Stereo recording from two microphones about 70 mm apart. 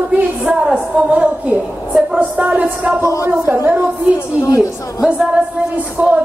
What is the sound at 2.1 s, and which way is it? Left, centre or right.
Music, right.